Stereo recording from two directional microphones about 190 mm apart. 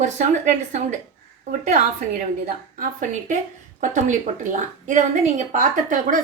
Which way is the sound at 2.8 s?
40° right (ahead or behind).